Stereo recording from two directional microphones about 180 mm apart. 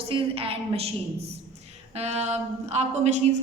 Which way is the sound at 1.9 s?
35° right (ahead or behind).